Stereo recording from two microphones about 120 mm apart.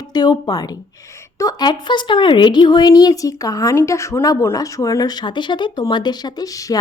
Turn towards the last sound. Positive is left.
turn(degrees=30)  # may be behind; listen again after turning